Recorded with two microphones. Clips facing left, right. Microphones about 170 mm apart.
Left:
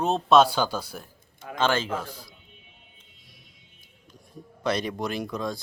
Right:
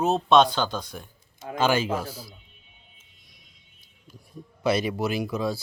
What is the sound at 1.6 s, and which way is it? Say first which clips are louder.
Speech: right 2 dB; 10° right (ahead or behind).